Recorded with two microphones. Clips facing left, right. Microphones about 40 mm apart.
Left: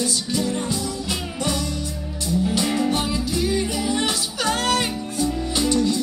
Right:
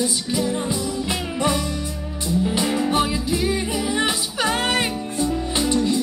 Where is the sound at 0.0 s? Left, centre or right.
Centre.